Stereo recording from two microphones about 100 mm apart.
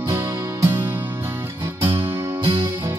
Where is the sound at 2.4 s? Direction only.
55° right (ahead or behind).